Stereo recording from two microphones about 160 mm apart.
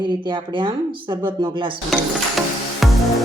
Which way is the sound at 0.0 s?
30° right (ahead or behind).